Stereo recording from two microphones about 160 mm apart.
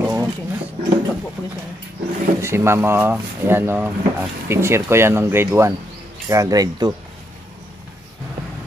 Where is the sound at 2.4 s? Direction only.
15° right (ahead or behind).